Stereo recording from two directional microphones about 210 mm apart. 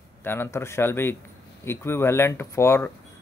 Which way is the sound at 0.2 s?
10° left (ahead or behind).